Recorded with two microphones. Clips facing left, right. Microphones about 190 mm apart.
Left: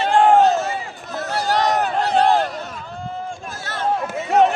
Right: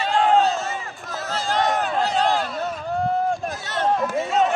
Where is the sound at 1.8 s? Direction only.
60° left (ahead or behind).